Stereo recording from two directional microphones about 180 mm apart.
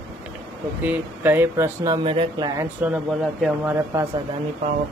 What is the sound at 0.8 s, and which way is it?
Speech, 10° right (ahead or behind).